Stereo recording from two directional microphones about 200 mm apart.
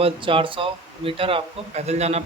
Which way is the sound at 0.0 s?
25° right (ahead or behind).